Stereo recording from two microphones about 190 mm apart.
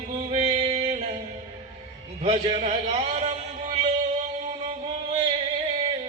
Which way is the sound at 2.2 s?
35° right (ahead or behind).